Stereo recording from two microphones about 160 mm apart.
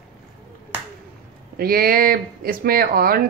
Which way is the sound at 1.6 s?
70° right (ahead or behind).